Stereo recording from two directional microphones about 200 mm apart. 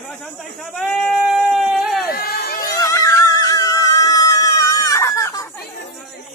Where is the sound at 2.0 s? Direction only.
50° left (ahead or behind).